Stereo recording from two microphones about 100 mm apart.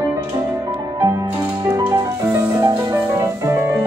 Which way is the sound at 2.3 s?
35° right (ahead or behind).